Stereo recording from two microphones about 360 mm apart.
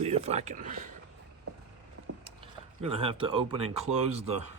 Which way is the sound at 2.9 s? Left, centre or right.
Centre.